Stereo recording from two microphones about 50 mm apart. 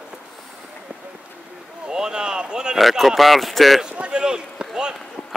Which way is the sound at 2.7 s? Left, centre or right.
Centre.